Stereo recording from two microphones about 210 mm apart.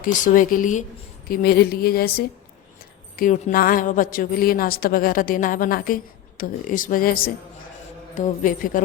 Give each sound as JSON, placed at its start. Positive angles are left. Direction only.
{"t": 0.0, "sound": "a woman's voice", "side_deg": 40}
{"t": 1.3, "sound": "a woman's voice", "side_deg": 50}